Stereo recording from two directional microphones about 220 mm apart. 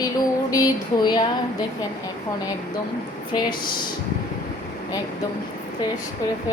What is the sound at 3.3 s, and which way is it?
Speech, 20° left (ahead or behind).